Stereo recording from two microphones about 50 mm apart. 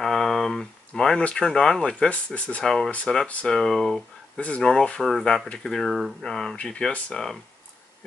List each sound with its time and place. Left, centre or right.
0.0 s a sound: centre
1.2 s speech: centre
2.6 s speech: centre
4.4 s speech: left; by 6.1 s centre
6.2 s speech: centre
6.5 s speech: left